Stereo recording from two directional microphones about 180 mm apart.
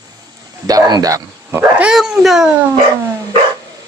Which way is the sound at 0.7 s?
20° right (ahead or behind).